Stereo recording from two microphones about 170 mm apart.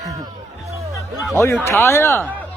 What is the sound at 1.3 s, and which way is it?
Speech, 15° left (ahead or behind).